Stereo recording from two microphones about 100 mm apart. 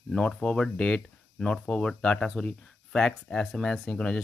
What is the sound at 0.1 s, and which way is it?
Speech, 10° left (ahead or behind).